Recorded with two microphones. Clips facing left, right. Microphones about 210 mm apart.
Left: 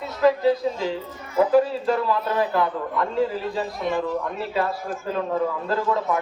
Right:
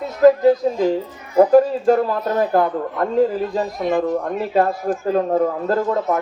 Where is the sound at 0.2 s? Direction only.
45° right (ahead or behind).